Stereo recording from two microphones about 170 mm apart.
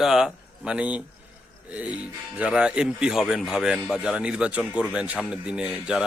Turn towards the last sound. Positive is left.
turn(degrees=-5)  # may be behind; listen again after turning